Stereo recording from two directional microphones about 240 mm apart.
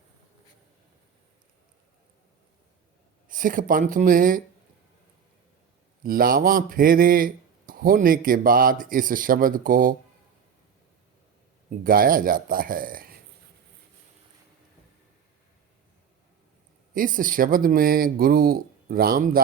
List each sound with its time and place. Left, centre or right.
3.2 s speech: right
6.0 s speech: right
11.7 s speech: right
16.9 s speech: right